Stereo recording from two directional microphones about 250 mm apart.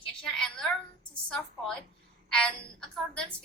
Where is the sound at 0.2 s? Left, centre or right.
Centre.